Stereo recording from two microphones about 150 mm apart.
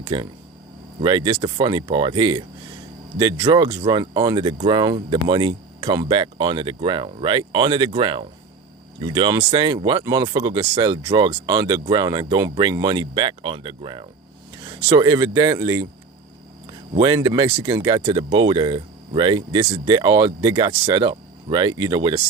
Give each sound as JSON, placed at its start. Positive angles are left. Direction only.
{"t": 0.0, "sound": "speech", "side_deg": -35}
{"t": 17.0, "sound": "speech", "side_deg": -30}